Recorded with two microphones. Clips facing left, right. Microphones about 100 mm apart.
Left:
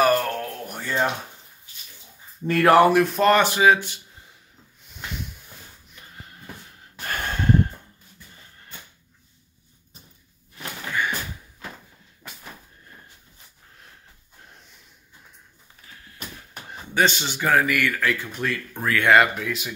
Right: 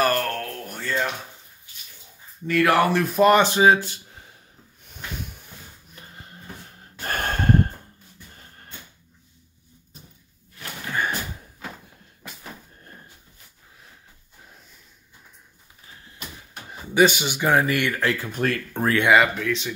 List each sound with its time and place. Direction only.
0.0 s a sound: 5° left (ahead or behind)
2.4 s speech: 35° left (ahead or behind)
2.9 s speech: centre (ahead or behind)
3.4 s speech: 30° right (ahead or behind)
7.1 s gasp: 50° right (ahead or behind)
10.9 s door: 40° right (ahead or behind)
14.4 s snort: centre (ahead or behind)
15.9 s a sound: 25° right (ahead or behind)
16.9 s speech: 10° right (ahead or behind); by 18.2 s 25° right (ahead or behind)
18.2 s speech: 45° right (ahead or behind)
19.1 s speech: centre (ahead or behind)